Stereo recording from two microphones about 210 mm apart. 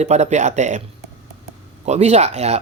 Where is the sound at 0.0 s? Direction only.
30° right (ahead or behind).